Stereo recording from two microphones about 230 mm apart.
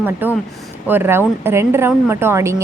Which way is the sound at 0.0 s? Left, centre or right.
Centre.